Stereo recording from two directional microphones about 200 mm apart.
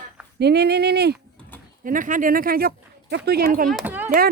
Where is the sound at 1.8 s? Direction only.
40° right (ahead or behind).